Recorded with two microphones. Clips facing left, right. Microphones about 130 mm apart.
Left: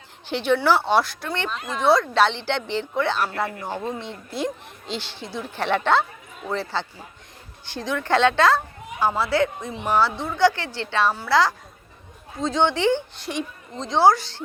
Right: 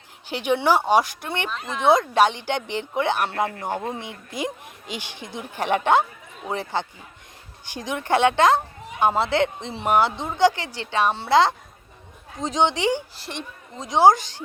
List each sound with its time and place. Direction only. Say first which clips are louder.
0.3 s a woman's voice: left 1 dB; 10° right (ahead or behind)
1.5 s speech: left 1 dB; centre (ahead or behind)
1.8 s a woman's voice: right 1 dB; 20° right (ahead or behind)
13.1 s speech: left 5 dB; centre (ahead or behind)
13.8 s a woman's voice: right 1 dB; 15° right (ahead or behind)